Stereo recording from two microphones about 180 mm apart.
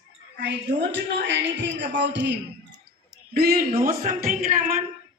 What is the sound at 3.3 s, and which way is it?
A woman's voice, 60° right (ahead or behind).